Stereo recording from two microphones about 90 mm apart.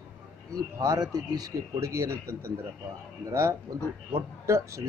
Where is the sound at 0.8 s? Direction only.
40° right (ahead or behind).